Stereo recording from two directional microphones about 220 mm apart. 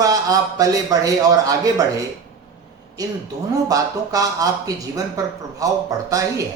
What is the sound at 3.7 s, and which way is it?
Speech, 15° right (ahead or behind).